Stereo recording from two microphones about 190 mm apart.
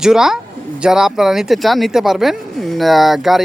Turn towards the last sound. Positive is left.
turn(degrees=0)  # may be behind; listen again after turning